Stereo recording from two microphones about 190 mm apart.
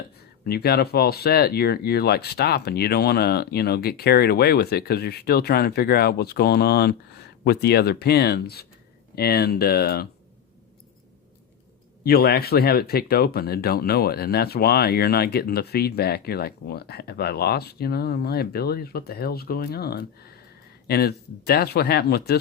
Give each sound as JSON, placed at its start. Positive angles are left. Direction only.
{"t": 0.4, "sound": "speech", "side_deg": 55}
{"t": 12.0, "sound": "speech", "side_deg": 55}